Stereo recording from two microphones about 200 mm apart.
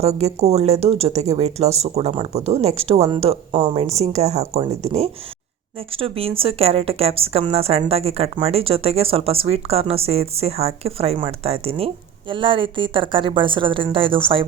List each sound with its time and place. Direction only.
0.0 s a woman's voice: 30° right (ahead or behind)